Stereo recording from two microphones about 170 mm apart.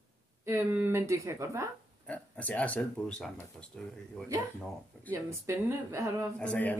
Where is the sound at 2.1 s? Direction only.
10° left (ahead or behind).